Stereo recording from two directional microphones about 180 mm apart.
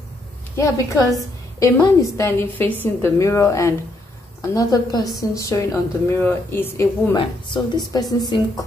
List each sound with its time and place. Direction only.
0.6 s a woman's voice: 15° left (ahead or behind)
7.2 s speech: 25° left (ahead or behind)